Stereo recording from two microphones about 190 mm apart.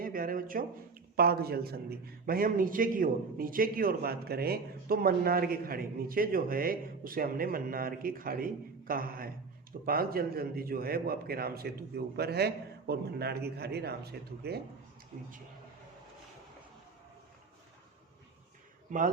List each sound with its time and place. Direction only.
0.0 s speech: 50° right (ahead or behind)
18.9 s a man's voice: 45° right (ahead or behind)